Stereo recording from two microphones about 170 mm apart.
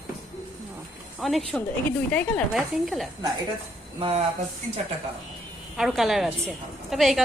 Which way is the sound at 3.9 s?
30° right (ahead or behind).